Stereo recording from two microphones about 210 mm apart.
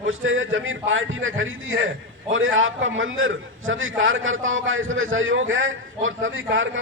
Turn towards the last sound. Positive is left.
turn(degrees=-65)  # may be behind; listen again after turning